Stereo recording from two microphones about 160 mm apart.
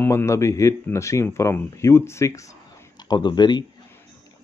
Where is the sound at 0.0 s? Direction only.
15° left (ahead or behind).